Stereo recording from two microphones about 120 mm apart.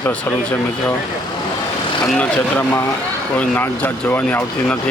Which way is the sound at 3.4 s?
15° left (ahead or behind).